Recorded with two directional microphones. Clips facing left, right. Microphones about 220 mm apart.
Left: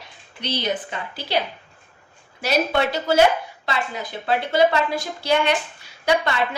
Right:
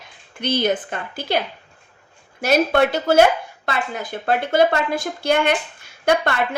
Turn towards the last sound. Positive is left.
turn(degrees=-55)  # may be behind; listen again after turning